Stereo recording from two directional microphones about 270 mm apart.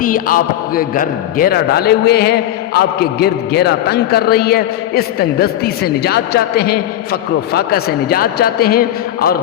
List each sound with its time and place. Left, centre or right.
0.0 s a man's voice: left